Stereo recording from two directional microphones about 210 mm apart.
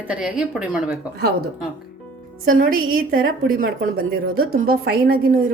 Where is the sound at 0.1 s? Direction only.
5° right (ahead or behind).